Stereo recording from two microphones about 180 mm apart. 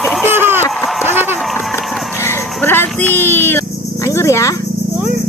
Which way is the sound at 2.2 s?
10° left (ahead or behind).